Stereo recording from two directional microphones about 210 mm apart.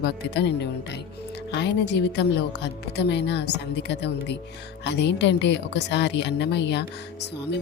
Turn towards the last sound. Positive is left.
turn(degrees=55)  # may be behind; listen again after turning